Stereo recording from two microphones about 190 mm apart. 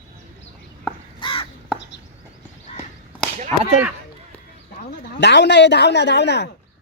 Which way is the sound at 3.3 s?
40° right (ahead or behind).